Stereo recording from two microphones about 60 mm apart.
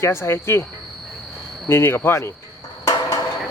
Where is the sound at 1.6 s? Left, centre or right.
Left.